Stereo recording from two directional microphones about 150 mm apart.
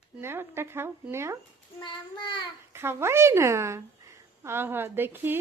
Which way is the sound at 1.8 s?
30° left (ahead or behind).